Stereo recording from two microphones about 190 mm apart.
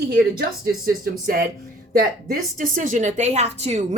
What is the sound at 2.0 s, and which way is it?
Speech, 50° right (ahead or behind).